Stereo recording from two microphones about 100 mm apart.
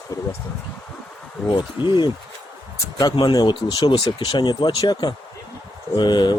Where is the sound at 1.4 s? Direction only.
50° left (ahead or behind).